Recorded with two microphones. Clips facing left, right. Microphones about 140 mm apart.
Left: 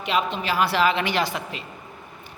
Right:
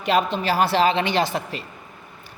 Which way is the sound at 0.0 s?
40° right (ahead or behind).